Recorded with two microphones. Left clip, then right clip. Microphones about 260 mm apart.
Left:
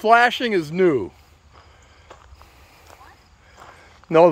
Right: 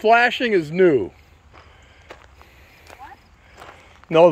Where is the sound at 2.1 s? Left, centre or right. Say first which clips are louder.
Right 3 dB; right.